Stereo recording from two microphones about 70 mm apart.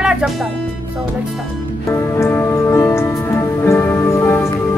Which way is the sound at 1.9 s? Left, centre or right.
Left.